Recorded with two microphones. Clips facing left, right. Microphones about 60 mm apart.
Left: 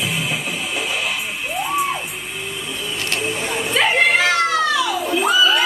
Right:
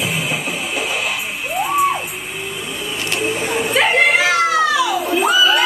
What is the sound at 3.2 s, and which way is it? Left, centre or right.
Children playing, centre.